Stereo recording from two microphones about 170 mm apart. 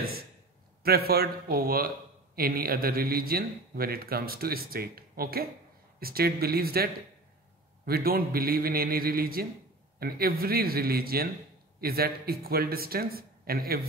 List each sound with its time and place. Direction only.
0.8 s a man's voice: 65° right (ahead or behind)